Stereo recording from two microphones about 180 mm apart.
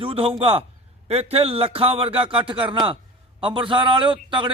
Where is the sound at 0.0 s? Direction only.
30° right (ahead or behind).